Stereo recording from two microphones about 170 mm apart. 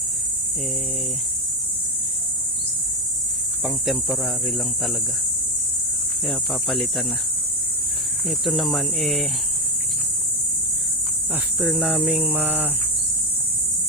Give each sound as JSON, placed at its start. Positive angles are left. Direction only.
{"t": 3.6, "sound": "speech", "side_deg": 0}
{"t": 6.2, "sound": "speech", "side_deg": 0}
{"t": 8.3, "sound": "speech", "side_deg": 0}
{"t": 11.6, "sound": "cricket", "side_deg": 0}